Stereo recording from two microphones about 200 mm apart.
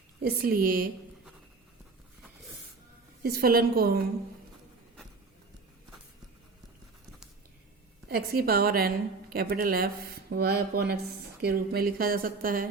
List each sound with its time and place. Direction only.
0.2 s speech: 50° right (ahead or behind)
3.2 s speech: 50° right (ahead or behind)
8.1 s speech: 50° right (ahead or behind)